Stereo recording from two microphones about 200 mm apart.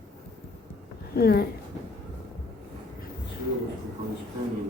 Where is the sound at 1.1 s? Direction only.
50° left (ahead or behind).